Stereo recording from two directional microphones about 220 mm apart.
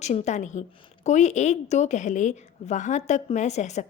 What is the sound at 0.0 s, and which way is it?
A woman's voice, 30° left (ahead or behind).